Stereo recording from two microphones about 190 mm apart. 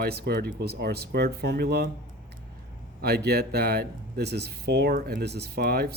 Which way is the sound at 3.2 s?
55° right (ahead or behind).